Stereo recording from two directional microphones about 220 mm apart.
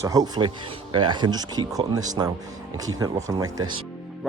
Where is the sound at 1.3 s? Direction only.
20° right (ahead or behind).